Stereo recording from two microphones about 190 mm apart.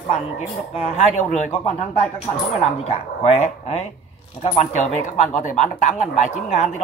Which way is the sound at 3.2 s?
35° left (ahead or behind).